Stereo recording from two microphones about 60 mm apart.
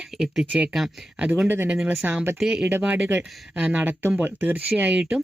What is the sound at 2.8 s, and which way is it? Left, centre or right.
Speech, right.